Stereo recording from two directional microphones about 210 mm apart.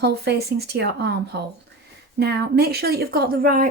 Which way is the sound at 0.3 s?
55° right (ahead or behind).